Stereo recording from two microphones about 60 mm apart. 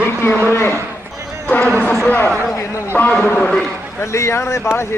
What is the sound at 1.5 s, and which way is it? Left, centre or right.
A man's voice, left.